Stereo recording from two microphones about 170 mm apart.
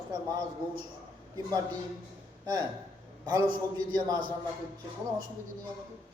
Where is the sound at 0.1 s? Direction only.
25° right (ahead or behind).